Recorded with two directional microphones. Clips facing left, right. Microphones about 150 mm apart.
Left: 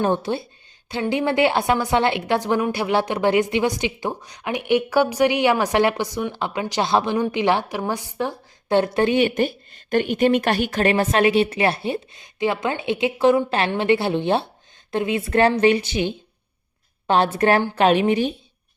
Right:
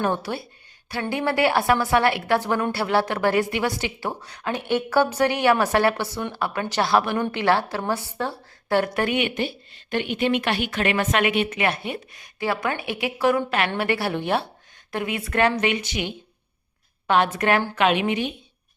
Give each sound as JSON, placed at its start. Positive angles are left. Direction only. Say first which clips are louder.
{"t": 0.0, "sound": "a woman's voice", "louder": "left 4 dB", "side_deg": 25}